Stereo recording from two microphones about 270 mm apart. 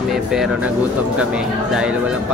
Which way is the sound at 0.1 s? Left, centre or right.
Centre.